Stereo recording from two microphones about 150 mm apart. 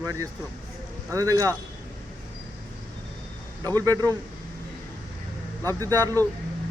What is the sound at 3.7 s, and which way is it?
Speech, 25° right (ahead or behind).